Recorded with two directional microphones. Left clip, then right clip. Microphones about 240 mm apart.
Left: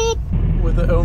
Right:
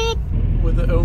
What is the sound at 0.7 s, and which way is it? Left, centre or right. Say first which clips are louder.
Speech: left 3 dB; centre.